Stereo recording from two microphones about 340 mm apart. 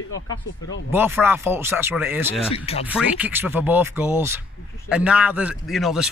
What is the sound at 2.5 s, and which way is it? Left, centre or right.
Speech, centre.